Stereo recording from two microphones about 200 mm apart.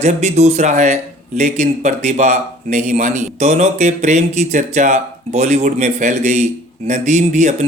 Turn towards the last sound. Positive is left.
turn(degrees=-35)  # may be behind; listen again after turning